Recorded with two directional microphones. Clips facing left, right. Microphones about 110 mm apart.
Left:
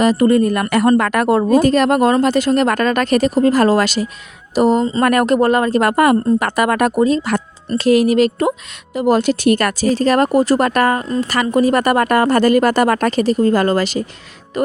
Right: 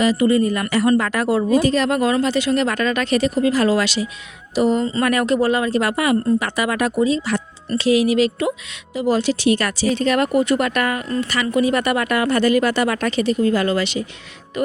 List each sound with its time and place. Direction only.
0.0 s a woman's voice: 50° left (ahead or behind)